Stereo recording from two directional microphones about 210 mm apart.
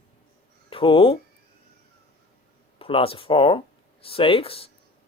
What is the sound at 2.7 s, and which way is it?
Speech, 25° left (ahead or behind).